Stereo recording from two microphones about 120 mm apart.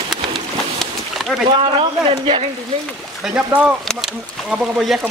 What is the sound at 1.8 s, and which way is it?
Speech, 50° right (ahead or behind).